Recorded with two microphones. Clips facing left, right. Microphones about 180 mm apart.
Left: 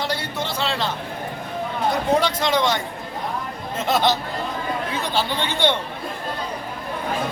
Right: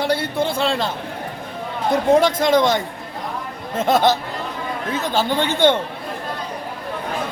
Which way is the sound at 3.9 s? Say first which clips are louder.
Right 4 dB; 50° right (ahead or behind).